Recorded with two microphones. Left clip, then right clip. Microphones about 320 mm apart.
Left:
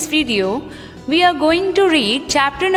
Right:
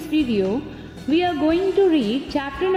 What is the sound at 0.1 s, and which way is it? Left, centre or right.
Speech, left.